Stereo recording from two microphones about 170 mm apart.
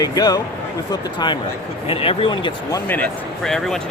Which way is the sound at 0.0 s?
20° left (ahead or behind).